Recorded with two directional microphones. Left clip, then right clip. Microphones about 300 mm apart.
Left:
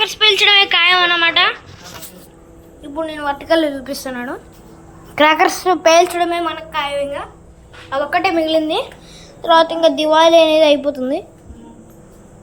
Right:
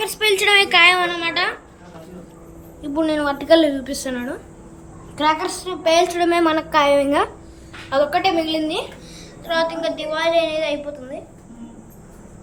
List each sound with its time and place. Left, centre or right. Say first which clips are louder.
0.0 s a woman's voice: left 6 dB; centre
2.8 s a woman's voice: right 1 dB; centre
5.1 s a woman's voice: left 7 dB; left
5.9 s a woman's voice: left 1 dB; centre
7.9 s a woman's voice: even; centre
8.2 s a woman's voice: left 4 dB; centre